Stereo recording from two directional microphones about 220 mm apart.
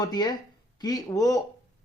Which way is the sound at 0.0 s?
20° left (ahead or behind).